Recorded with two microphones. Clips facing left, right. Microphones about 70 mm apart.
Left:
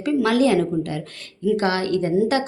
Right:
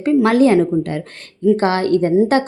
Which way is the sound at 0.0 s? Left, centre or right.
Right.